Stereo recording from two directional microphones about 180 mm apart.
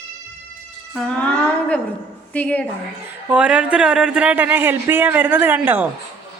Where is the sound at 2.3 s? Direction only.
5° left (ahead or behind).